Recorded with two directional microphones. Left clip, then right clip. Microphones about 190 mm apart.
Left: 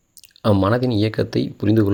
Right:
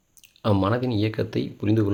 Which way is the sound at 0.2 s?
25° left (ahead or behind).